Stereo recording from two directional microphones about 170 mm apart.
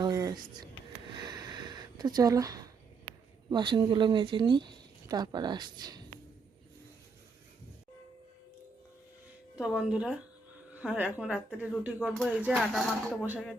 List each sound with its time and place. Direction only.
0.0 s a sound: 25° right (ahead or behind)
1.1 s sniff: 25° right (ahead or behind)
3.5 s speech: 25° right (ahead or behind)
9.6 s a woman's voice: 5° right (ahead or behind)